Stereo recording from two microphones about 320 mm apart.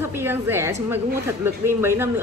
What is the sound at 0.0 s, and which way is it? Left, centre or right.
A woman's voice, centre.